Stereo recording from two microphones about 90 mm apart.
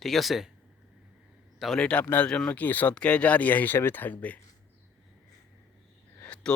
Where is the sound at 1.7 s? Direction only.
15° left (ahead or behind).